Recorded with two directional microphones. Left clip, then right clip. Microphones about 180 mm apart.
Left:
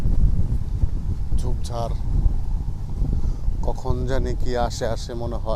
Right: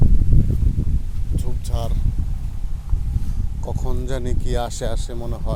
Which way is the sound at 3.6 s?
20° right (ahead or behind).